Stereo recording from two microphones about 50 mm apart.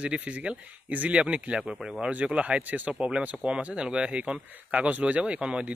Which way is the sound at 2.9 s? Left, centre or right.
Centre.